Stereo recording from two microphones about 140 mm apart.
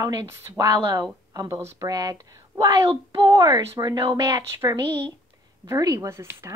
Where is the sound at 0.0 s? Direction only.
25° right (ahead or behind).